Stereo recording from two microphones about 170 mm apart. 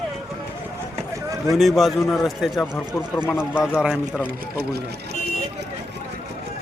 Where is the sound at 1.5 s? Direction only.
Centre (ahead or behind).